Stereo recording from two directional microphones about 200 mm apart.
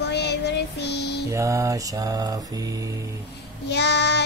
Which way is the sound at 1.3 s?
15° right (ahead or behind).